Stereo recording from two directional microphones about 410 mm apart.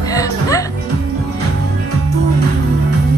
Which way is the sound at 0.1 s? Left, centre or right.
Centre.